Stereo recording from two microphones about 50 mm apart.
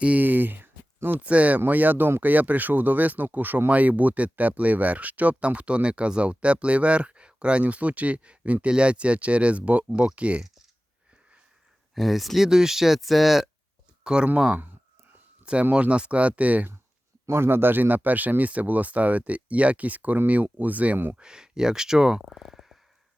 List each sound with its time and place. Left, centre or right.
0.0 s speech: right
1.2 s speech: right
11.9 s speech: centre
14.0 s speech: centre
15.7 s speech: right
17.2 s speech: right
21.2 s speech: centre